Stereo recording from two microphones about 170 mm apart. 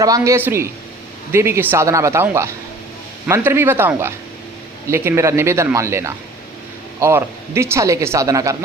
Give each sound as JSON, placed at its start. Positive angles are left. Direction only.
{"t": 0.0, "sound": "speech", "side_deg": -20}